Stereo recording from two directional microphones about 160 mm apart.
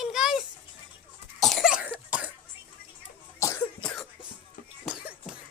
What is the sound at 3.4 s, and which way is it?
Cough, 20° left (ahead or behind).